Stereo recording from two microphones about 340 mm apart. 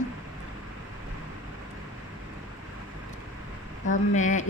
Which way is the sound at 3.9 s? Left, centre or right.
Left.